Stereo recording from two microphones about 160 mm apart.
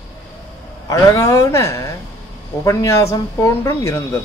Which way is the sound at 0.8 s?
20° left (ahead or behind).